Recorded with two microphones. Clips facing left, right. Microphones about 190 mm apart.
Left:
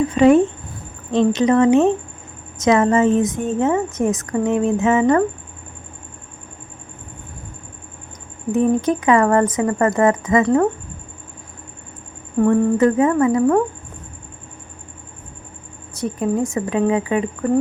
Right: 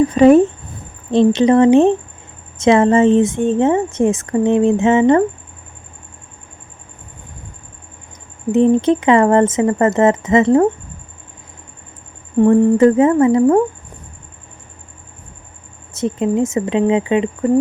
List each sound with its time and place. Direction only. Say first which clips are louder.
0.1 s a woman's voice: right 1 dB; 40° right (ahead or behind)
8.5 s a woman's voice: right 5 dB; 25° right (ahead or behind)
12.4 s a woman's voice: right 4 dB; 25° right (ahead or behind)
16.0 s a woman's voice: right 4 dB; 25° right (ahead or behind)